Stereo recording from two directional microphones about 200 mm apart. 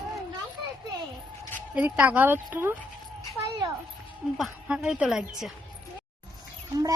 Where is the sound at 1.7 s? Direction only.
10° right (ahead or behind).